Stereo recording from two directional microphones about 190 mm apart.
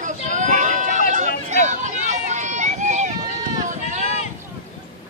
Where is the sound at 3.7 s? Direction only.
40° right (ahead or behind).